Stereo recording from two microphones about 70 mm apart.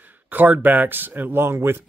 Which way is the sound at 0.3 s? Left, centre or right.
Right.